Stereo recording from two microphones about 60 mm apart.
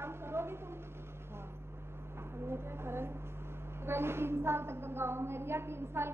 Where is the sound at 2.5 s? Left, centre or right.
Right.